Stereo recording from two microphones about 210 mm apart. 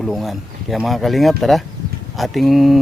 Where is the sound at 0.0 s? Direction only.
Centre (ahead or behind).